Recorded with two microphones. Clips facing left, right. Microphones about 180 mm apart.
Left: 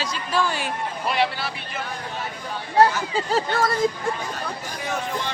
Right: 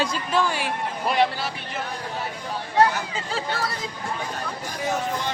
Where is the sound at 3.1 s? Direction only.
45° left (ahead or behind).